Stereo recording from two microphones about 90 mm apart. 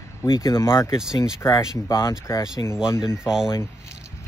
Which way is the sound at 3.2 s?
5° right (ahead or behind).